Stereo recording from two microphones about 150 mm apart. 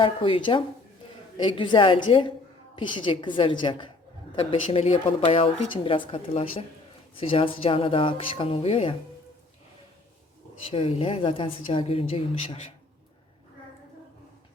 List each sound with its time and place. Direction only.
0.0 s a woman's voice: 35° left (ahead or behind)
4.6 s speech: 45° left (ahead or behind)
10.7 s speech: 40° left (ahead or behind)